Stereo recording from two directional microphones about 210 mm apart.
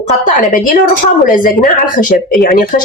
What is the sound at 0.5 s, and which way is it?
A woman's voice, 40° left (ahead or behind).